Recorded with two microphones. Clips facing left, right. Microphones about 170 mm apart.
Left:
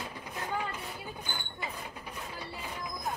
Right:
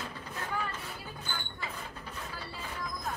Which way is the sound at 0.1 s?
15° left (ahead or behind).